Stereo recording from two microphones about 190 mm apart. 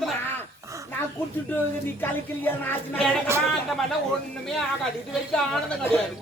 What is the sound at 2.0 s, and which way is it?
Speech, 10° left (ahead or behind).